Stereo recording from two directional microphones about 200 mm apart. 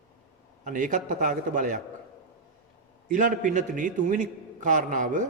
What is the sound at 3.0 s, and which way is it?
A man's voice, 40° right (ahead or behind).